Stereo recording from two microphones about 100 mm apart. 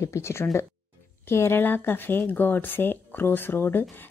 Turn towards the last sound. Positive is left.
turn(degrees=20)  # may be behind; listen again after turning